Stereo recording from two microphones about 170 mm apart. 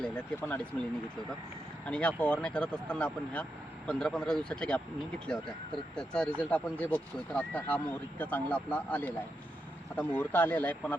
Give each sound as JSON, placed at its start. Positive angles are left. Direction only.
{"t": 0.0, "sound": "speech", "side_deg": 5}
{"t": 1.9, "sound": "speech", "side_deg": 5}